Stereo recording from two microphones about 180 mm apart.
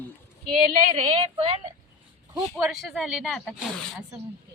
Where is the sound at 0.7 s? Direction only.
35° right (ahead or behind).